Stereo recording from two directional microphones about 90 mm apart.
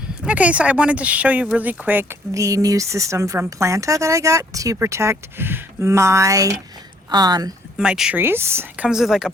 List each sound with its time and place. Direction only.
0.3 s speech: 15° right (ahead or behind)
2.3 s speech: 40° right (ahead or behind)
7.8 s speech: 10° right (ahead or behind)
8.1 s speech: 25° right (ahead or behind)
8.7 s speech: 10° right (ahead or behind)